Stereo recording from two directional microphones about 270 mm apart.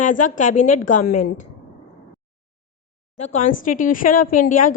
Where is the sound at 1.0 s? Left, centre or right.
Left.